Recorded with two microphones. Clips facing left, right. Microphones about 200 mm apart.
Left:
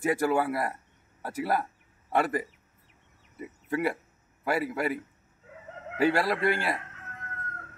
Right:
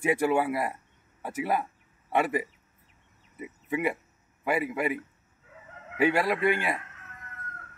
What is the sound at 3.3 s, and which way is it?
Speech, 5° right (ahead or behind).